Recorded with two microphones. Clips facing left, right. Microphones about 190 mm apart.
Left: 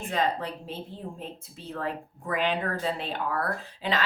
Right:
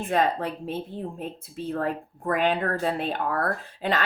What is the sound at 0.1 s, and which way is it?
A woman's voice, 55° right (ahead or behind).